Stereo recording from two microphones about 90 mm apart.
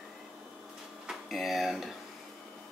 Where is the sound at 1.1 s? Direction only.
Centre (ahead or behind).